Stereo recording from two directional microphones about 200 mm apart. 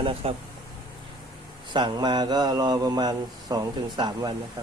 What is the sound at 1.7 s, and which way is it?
Speech, 20° right (ahead or behind).